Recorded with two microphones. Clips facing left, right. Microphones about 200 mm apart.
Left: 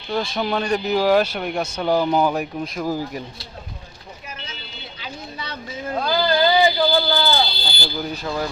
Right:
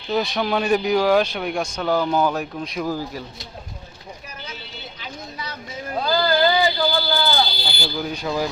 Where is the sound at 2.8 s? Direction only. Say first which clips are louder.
Left 2 dB; 15° left (ahead or behind).